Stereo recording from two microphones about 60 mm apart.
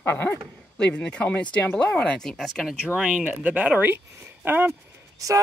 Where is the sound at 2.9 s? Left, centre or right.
Centre.